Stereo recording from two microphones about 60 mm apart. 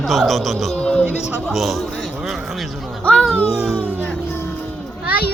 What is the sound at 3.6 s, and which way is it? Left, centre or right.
Speech, centre.